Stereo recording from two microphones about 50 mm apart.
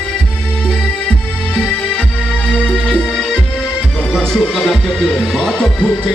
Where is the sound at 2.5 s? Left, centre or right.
Centre.